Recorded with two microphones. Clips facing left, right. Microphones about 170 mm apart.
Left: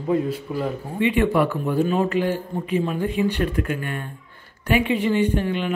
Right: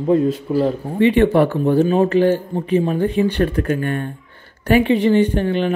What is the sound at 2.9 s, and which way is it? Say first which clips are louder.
Speech: right 5 dB; 35° right (ahead or behind).